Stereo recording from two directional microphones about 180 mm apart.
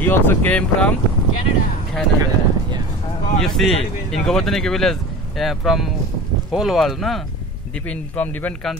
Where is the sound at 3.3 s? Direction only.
Centre (ahead or behind).